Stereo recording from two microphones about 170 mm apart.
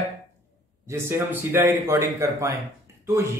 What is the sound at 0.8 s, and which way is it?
Speech, 15° right (ahead or behind).